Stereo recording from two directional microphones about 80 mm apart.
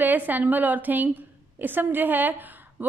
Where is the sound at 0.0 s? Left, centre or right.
Right.